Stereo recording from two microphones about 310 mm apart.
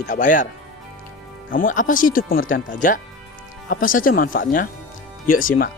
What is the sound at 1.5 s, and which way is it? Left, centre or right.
Speech, left.